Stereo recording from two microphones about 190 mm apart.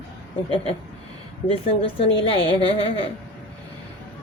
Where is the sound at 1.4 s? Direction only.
30° left (ahead or behind).